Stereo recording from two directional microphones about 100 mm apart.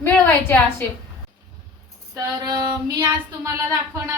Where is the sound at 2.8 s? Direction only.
35° right (ahead or behind).